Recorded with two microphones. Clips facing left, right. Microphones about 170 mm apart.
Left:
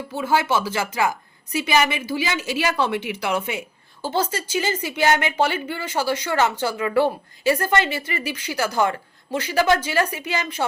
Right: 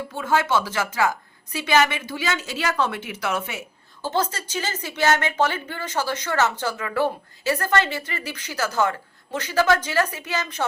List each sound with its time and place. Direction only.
0.1 s speech: 10° left (ahead or behind)